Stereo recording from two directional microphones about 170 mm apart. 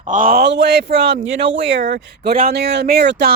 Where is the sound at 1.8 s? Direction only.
55° right (ahead or behind); by 3.3 s 70° right (ahead or behind).